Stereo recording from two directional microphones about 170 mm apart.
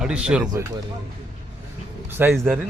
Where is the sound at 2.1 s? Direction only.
10° right (ahead or behind).